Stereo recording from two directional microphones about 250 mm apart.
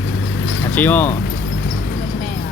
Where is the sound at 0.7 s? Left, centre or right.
Centre.